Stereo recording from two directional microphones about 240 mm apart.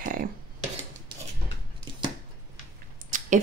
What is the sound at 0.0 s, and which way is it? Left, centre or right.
Cutlery, right.